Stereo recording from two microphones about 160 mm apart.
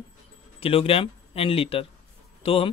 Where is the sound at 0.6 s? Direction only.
35° left (ahead or behind).